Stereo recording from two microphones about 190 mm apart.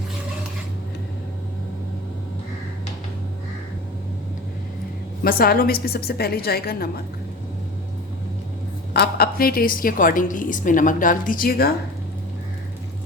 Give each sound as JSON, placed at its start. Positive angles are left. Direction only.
{"t": 5.2, "sound": "a woman's voice", "side_deg": 50}
{"t": 8.9, "sound": "a woman's voice", "side_deg": 55}